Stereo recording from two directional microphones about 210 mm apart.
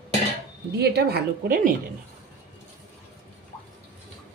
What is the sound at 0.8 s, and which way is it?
Speech, 50° right (ahead or behind).